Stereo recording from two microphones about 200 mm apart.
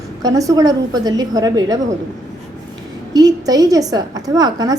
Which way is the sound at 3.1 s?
20° right (ahead or behind).